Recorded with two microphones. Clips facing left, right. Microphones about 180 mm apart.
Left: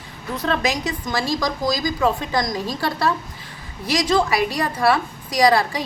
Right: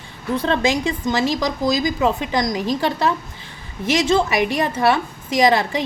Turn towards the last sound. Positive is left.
turn(degrees=-20)  # may be behind; listen again after turning